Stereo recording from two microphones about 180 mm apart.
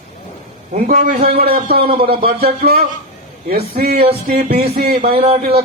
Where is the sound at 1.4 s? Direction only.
60° right (ahead or behind).